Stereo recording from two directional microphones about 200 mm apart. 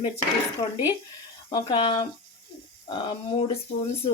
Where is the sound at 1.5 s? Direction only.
25° left (ahead or behind).